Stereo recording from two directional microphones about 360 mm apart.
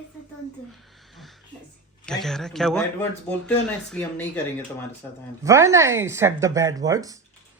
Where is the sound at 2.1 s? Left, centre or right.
Centre.